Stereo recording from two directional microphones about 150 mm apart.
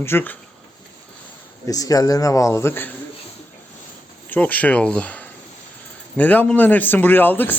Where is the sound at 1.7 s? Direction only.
25° left (ahead or behind).